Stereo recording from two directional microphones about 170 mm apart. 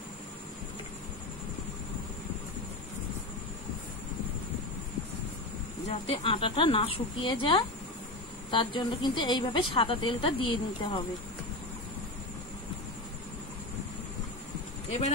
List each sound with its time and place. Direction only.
5.9 s a woman's voice: 35° left (ahead or behind)
14.9 s speech: 40° left (ahead or behind)